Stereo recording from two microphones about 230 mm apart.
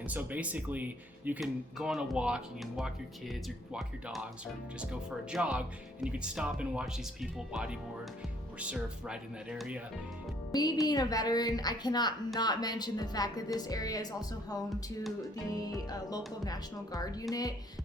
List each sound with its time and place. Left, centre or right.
0.0 s speech: centre
10.5 s a woman's voice: centre
14.7 s speech: centre
15.9 s a woman's voice: centre